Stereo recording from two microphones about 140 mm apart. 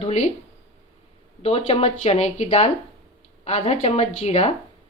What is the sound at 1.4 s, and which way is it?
Speech, 50° left (ahead or behind).